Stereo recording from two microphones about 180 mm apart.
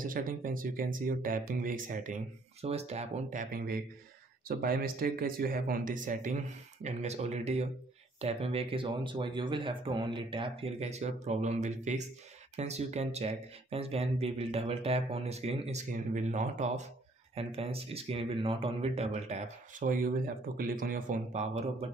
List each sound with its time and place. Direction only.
0.0 s speech: 50° right (ahead or behind)
2.6 s speech: 35° right (ahead or behind)